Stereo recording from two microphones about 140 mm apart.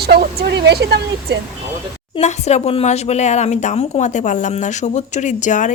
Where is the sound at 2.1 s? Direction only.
50° left (ahead or behind).